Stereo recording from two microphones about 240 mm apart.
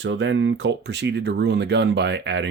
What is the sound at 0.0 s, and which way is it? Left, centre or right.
Speech, right.